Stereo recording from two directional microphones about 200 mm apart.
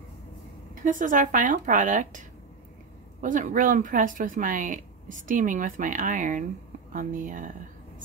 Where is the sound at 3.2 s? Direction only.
40° right (ahead or behind).